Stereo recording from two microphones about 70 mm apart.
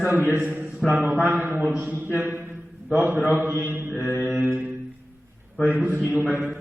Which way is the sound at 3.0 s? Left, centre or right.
Right.